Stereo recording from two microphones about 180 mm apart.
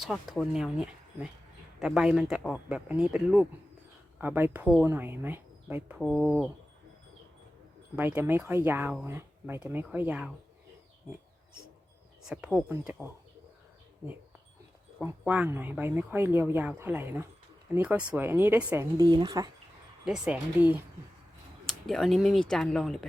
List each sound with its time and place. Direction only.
0.0 s speech: centre (ahead or behind)
6.0 s speech: centre (ahead or behind)
7.9 s speech: 10° right (ahead or behind)
12.2 s speech: 5° right (ahead or behind)
15.2 s speech: 10° right (ahead or behind)
19.1 s speech: 20° right (ahead or behind)
20.1 s speech: 5° right (ahead or behind)